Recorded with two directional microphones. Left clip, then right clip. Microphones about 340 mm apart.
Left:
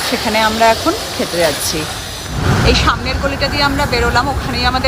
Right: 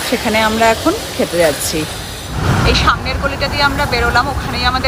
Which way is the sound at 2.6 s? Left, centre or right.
Centre.